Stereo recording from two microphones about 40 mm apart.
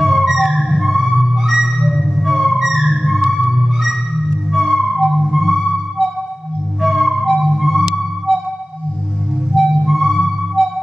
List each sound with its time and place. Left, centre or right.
0.0 s theremin: centre
1.2 s music: centre
8.3 s music: centre
9.5 s music: centre